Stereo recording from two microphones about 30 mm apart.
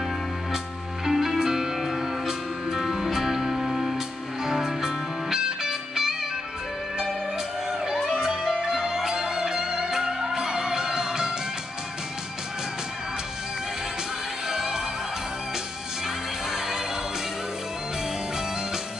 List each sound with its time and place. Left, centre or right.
1.0 s music: centre
4.5 s music: centre
8.2 s music: right
14.5 s music: centre
16.4 s music: centre